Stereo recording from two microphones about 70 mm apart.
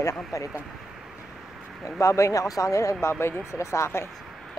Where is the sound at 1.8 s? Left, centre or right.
Left.